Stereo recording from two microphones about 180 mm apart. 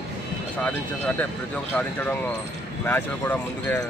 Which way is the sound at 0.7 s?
10° left (ahead or behind).